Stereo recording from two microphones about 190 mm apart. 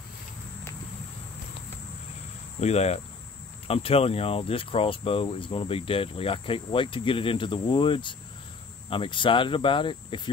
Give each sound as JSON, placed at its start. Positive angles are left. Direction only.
{"t": 2.6, "sound": "cricket", "side_deg": 35}
{"t": 3.6, "sound": "speech", "side_deg": 30}